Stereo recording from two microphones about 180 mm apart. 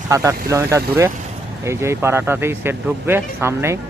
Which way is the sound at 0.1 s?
15° right (ahead or behind).